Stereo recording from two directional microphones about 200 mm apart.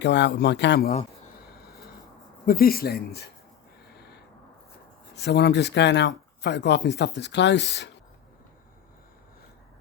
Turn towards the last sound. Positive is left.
turn(degrees=60)  # may be behind; listen again after turning